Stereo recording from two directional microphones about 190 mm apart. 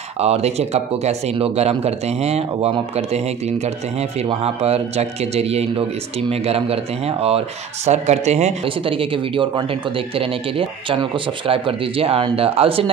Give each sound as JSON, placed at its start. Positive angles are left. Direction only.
{"t": 0.2, "sound": "speech", "side_deg": -35}
{"t": 4.2, "sound": "speech", "side_deg": -30}